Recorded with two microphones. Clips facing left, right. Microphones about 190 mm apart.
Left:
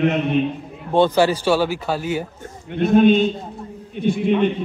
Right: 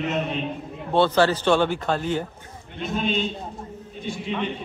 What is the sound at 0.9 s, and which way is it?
A man's voice, 15° left (ahead or behind).